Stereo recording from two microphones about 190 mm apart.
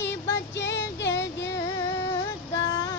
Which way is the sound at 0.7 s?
70° left (ahead or behind).